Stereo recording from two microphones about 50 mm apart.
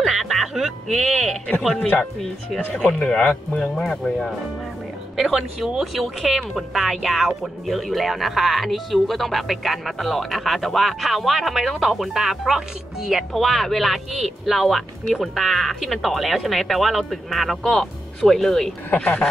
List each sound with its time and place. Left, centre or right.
0.0 s music: centre
2.8 s speech: left
5.1 s speech: centre
13.3 s speech: centre
18.9 s speech: left